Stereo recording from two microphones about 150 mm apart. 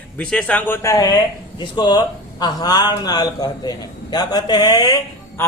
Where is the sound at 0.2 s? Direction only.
5° left (ahead or behind); by 5.0 s 25° left (ahead or behind).